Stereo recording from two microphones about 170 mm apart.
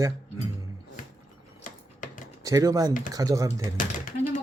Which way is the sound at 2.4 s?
20° right (ahead or behind).